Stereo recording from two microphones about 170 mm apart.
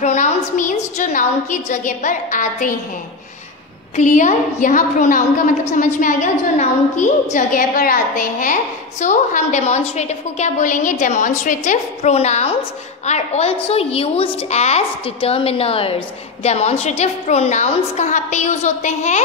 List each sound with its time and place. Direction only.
0.0 s a woman's voice: 45° left (ahead or behind)
3.9 s a woman's voice: 45° left (ahead or behind)